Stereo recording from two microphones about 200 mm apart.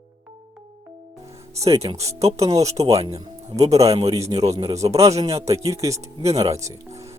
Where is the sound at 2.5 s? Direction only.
15° right (ahead or behind).